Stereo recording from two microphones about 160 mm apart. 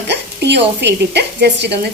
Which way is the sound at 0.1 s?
90° right.